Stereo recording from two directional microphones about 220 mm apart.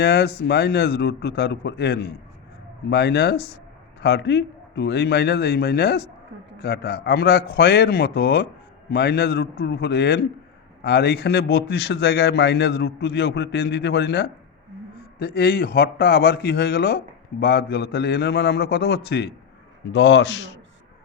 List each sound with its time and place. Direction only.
0.0 s a man's voice: 50° left (ahead or behind)